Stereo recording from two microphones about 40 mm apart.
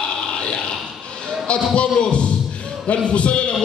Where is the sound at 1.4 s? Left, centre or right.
Left.